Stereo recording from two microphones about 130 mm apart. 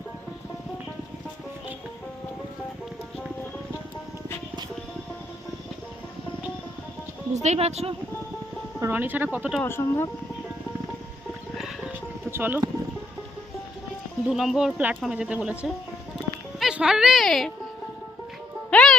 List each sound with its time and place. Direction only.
7.4 s a woman's voice: 55° right (ahead or behind)
8.8 s speech: 15° right (ahead or behind)
9.6 s speech: 20° left (ahead or behind)
12.3 s speech: 15° right (ahead or behind)
14.3 s speech: 5° right (ahead or behind)
18.7 s music: 5° left (ahead or behind)